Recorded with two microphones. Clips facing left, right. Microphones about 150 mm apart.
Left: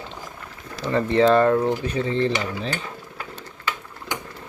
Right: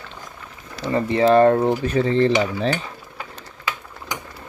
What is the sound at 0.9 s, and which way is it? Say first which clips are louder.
Speech: even; 10° right (ahead or behind).